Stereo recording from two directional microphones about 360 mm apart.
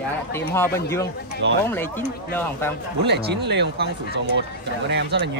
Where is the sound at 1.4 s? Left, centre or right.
Right.